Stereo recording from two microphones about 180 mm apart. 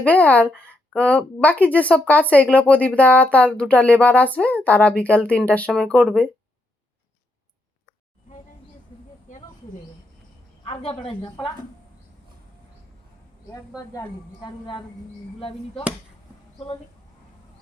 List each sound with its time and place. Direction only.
0.0 s a woman's voice: 10° left (ahead or behind)
9.3 s a sound: 45° left (ahead or behind)
10.6 s a woman's voice: 30° left (ahead or behind)
13.5 s a woman's voice: 20° left (ahead or behind)